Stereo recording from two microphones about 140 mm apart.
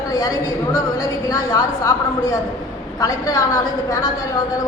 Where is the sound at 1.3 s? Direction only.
25° left (ahead or behind).